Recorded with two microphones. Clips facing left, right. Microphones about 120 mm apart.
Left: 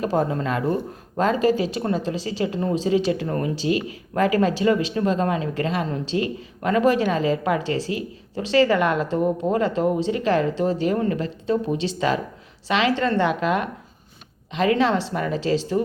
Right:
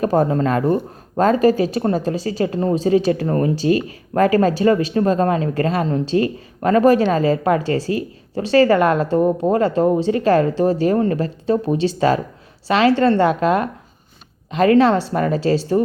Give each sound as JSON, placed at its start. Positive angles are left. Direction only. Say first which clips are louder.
{"t": 0.0, "sound": "speech", "louder": "right 6 dB", "side_deg": -45}